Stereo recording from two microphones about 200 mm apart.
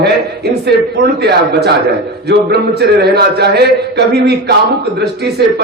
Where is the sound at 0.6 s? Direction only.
55° right (ahead or behind).